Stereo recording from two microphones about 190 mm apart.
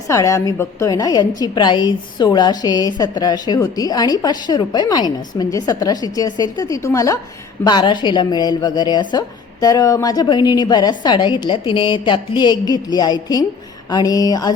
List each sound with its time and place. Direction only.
0.1 s a woman's voice: 15° left (ahead or behind)